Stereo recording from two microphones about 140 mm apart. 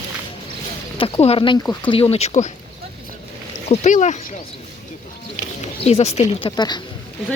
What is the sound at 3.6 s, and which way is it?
Speech, 60° left (ahead or behind).